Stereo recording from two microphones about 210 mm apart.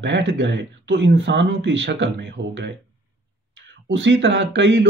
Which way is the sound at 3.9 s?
60° right (ahead or behind).